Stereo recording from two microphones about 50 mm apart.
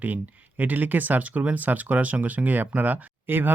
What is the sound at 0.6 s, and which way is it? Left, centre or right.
Speech, right.